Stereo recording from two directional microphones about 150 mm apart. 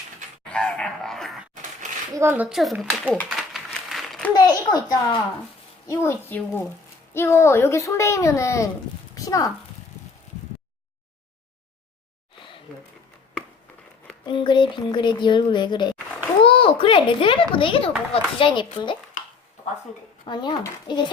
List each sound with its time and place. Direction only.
0.4 s a sound: 5° left (ahead or behind)
2.1 s speech: 15° right (ahead or behind)
3.2 s a sound: centre (ahead or behind)
4.4 s a child's voice: 25° left (ahead or behind)
5.9 s a woman's voice: 15° left (ahead or behind)
14.3 s speech: 30° left (ahead or behind)
20.2 s a child's voice: 30° left (ahead or behind)